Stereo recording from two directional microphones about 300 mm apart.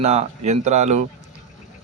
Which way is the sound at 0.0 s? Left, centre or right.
Right.